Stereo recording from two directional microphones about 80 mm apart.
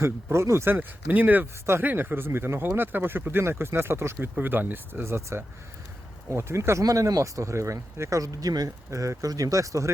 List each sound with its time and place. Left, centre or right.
0.0 s speech: right